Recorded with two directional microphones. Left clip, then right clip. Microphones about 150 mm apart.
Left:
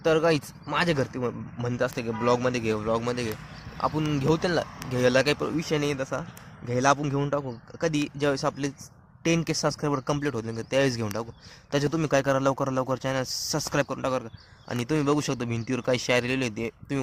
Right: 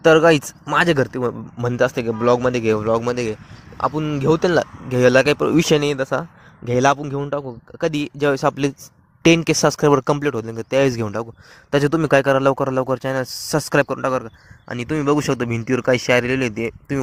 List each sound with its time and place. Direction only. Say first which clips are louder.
0.0 s speech: right 10 dB; 45° right (ahead or behind)
5.5 s speech: right 10 dB; 65° right (ahead or behind)
7.0 s speech: right 4 dB; 45° right (ahead or behind)
14.7 s speech: right 5 dB; 20° right (ahead or behind)
15.1 s speech: right 8 dB; 40° right (ahead or behind)